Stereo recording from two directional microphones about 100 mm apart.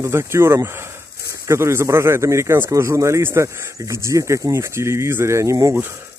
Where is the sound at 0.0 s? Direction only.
25° right (ahead or behind).